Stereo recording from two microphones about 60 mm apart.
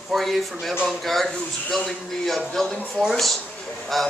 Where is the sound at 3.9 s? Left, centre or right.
Centre.